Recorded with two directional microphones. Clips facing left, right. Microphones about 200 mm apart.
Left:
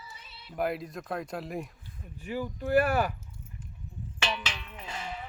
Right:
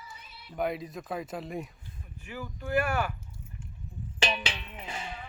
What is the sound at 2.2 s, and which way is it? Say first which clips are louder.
Speech: left 6 dB; 35° left (ahead or behind).